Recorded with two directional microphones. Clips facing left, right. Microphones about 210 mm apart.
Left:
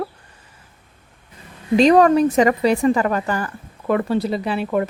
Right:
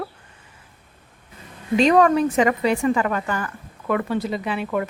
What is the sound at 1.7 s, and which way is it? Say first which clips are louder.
A woman's voice: left 3 dB; 35° left (ahead or behind).